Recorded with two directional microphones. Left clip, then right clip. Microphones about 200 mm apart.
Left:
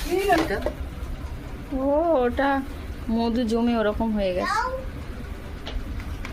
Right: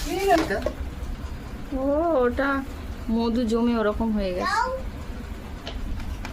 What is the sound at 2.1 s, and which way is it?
A woman's voice, centre (ahead or behind).